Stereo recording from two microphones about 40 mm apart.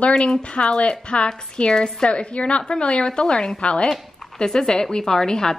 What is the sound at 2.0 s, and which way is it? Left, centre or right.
A woman's voice, left.